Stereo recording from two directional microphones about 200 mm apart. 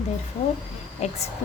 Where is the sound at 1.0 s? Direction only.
35° left (ahead or behind).